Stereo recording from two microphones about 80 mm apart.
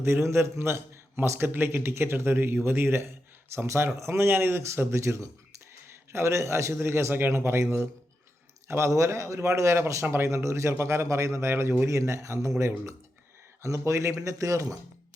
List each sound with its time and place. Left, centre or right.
0.0 s speech: right